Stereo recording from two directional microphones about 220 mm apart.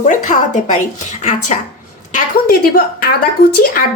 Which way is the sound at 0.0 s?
35° left (ahead or behind).